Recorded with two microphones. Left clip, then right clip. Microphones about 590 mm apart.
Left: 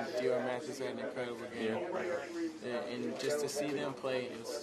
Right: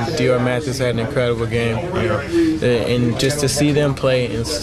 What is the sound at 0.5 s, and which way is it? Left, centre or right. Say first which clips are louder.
Speech: right 18 dB; right.